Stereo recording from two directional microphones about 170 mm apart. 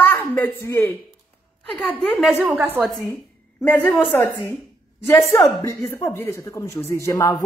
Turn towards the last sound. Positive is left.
turn(degrees=20)  # may be behind; listen again after turning